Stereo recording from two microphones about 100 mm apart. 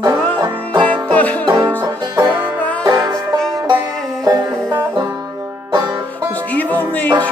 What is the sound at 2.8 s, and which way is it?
Music, 35° right (ahead or behind).